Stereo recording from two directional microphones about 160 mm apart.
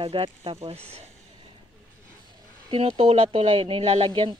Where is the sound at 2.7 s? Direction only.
40° right (ahead or behind).